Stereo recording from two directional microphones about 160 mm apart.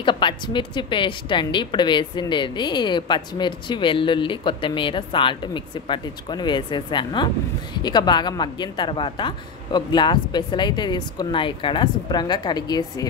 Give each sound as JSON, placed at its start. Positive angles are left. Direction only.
{"t": 0.0, "sound": "a woman's voice", "side_deg": 30}